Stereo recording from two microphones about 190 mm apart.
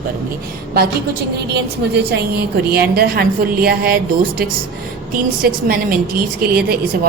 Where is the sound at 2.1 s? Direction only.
55° right (ahead or behind).